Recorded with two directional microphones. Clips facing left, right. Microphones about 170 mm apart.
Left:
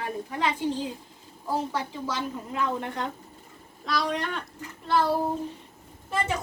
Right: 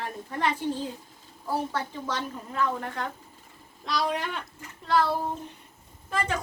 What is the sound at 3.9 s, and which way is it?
Speech, 5° right (ahead or behind).